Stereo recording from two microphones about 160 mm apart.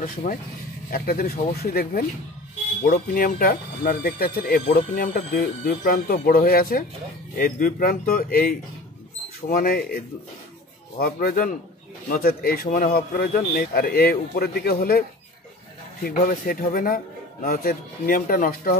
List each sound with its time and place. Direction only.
0.0 s a man's voice: 60° left (ahead or behind)
2.8 s a man's voice: 60° left (ahead or behind)
11.0 s a man's voice: 65° left (ahead or behind)
12.6 s a man's voice: 60° left (ahead or behind)